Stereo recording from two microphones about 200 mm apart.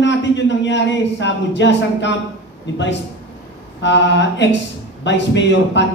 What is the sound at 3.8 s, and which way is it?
A man's voice, 60° left (ahead or behind).